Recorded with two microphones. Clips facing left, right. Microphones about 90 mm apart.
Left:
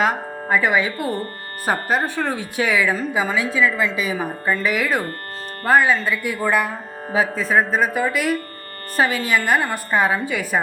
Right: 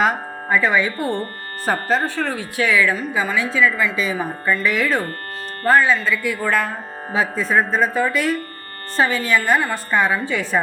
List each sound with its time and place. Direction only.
0.0 s speech: centre (ahead or behind)
0.6 s speech: 10° left (ahead or behind)
0.9 s speech: 30° right (ahead or behind)
1.6 s speech: 15° left (ahead or behind)
4.6 s speech: 10° left (ahead or behind)
7.1 s speech: 5° left (ahead or behind)